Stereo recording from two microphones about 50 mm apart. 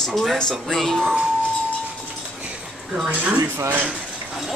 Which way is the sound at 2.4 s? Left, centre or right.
Right.